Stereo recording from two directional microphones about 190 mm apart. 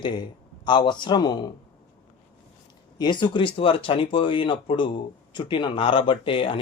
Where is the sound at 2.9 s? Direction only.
20° left (ahead or behind).